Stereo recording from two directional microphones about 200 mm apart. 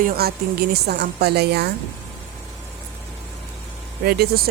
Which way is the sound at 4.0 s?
50° right (ahead or behind).